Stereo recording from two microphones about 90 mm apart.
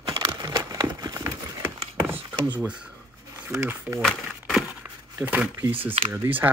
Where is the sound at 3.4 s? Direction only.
35° right (ahead or behind).